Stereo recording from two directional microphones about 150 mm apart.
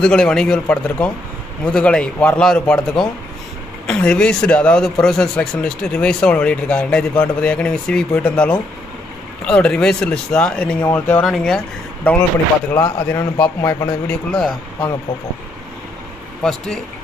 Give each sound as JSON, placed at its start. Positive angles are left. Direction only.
{"t": 0.0, "sound": "speech", "side_deg": 5}
{"t": 11.2, "sound": "speech", "side_deg": 0}
{"t": 12.8, "sound": "a man's voice", "side_deg": 20}
{"t": 16.4, "sound": "speech", "side_deg": 5}